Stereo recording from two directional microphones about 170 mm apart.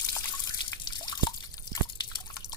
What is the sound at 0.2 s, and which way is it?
Drip, 20° left (ahead or behind).